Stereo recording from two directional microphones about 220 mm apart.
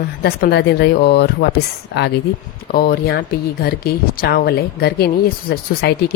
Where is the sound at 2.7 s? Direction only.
45° left (ahead or behind).